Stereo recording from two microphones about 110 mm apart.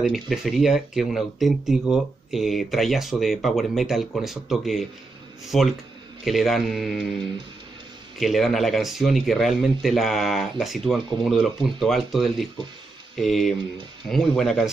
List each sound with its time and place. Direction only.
0.0 s speech: 5° right (ahead or behind)
8.2 s speech: centre (ahead or behind)